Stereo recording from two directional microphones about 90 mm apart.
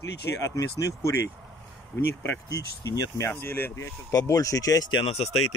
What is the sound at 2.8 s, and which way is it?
Speech, 40° left (ahead or behind).